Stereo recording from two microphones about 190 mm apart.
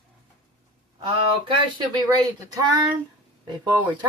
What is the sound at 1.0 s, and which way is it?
Speech, 25° right (ahead or behind).